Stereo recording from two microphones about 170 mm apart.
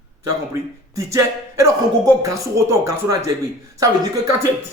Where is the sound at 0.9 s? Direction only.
15° right (ahead or behind).